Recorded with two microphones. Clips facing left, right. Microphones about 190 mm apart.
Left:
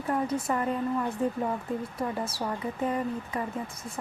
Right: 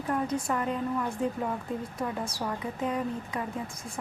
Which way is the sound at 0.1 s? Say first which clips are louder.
Left 1 dB; 5° left (ahead or behind).